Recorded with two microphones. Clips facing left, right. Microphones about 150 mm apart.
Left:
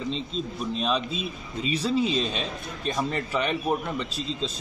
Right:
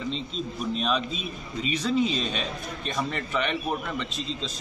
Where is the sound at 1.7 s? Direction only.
30° left (ahead or behind).